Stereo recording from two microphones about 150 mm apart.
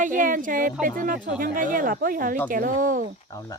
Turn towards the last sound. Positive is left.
turn(degrees=20)  # may be behind; listen again after turning